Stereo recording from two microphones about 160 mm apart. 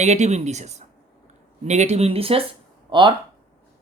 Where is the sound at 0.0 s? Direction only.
45° right (ahead or behind).